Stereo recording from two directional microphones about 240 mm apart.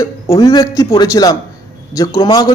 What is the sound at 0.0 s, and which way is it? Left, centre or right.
A man's voice, centre.